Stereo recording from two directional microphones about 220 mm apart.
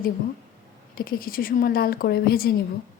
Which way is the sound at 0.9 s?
40° left (ahead or behind).